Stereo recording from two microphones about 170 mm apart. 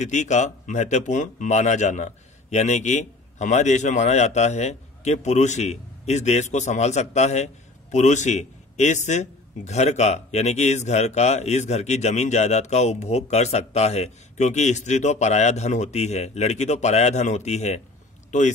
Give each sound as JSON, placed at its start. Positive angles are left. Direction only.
{"t": 0.0, "sound": "a man's voice", "side_deg": 45}